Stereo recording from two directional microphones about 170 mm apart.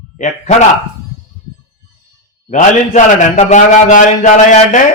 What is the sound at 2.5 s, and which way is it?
A man's voice, 45° left (ahead or behind).